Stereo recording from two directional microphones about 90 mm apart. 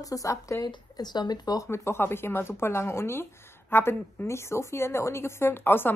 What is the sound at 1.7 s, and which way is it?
A woman's voice, 25° left (ahead or behind).